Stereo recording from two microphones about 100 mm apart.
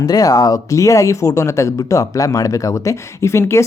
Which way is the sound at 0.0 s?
40° left (ahead or behind).